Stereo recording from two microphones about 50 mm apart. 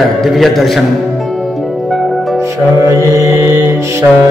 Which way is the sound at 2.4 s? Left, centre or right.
Right.